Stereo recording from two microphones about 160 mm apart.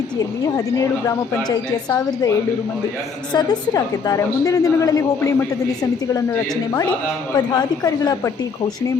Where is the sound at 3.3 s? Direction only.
25° left (ahead or behind).